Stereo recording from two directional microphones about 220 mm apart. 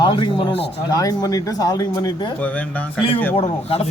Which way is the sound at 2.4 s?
5° left (ahead or behind).